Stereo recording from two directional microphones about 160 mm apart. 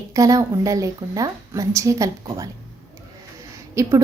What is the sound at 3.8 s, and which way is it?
Speech, 20° right (ahead or behind).